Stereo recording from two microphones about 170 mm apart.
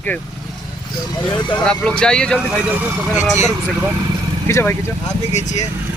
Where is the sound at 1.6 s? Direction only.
5° left (ahead or behind).